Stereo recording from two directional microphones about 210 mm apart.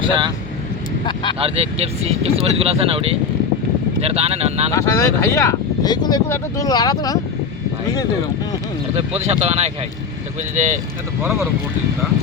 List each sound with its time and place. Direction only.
1.0 s speech: 20° left (ahead or behind)
1.4 s speech: 30° right (ahead or behind)
4.7 s speech: 15° left (ahead or behind)
9.0 s speech: 30° right (ahead or behind)
11.2 s speech: centre (ahead or behind)